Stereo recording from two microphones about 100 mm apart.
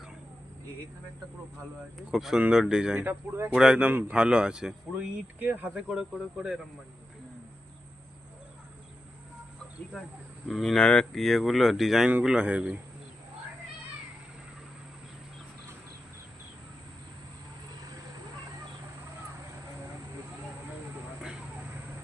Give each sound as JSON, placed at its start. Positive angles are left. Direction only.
{"t": 2.0, "sound": "speech", "side_deg": -5}
{"t": 3.1, "sound": "speech", "side_deg": -25}
{"t": 3.5, "sound": "speech", "side_deg": -5}
{"t": 5.9, "sound": "speech", "side_deg": -5}
{"t": 10.5, "sound": "speech", "side_deg": 5}